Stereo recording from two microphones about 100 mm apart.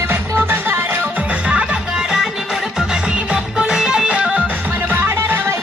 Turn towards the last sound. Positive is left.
turn(degrees=-20)  # may be behind; listen again after turning